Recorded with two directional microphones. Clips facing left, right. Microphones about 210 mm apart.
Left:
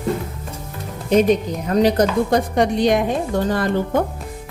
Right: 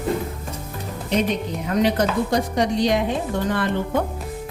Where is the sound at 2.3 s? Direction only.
55° left (ahead or behind).